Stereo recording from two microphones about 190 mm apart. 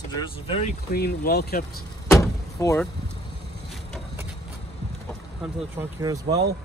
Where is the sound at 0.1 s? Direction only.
35° left (ahead or behind).